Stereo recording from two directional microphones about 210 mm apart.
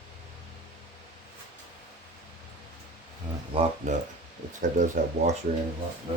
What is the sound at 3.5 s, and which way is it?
Speech, 30° right (ahead or behind).